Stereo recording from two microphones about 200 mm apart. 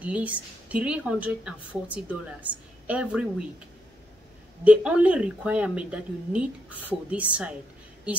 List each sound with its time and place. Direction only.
0.0 s a woman's voice: 5° right (ahead or behind)
4.6 s a woman's voice: 5° right (ahead or behind)